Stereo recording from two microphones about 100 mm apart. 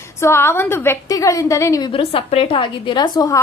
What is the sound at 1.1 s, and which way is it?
Speech, 35° left (ahead or behind).